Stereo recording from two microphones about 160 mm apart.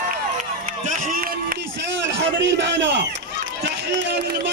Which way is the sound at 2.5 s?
90° right.